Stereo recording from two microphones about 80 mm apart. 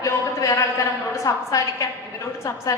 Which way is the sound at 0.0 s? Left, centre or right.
Left.